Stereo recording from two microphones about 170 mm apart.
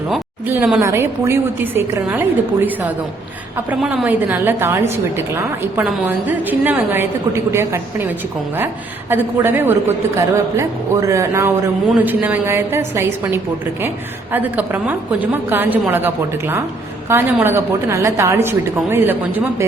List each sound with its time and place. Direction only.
0.4 s a woman's voice: 10° right (ahead or behind)